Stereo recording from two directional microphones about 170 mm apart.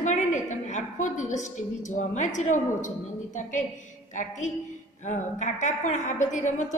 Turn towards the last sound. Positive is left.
turn(degrees=45)  # may be behind; listen again after turning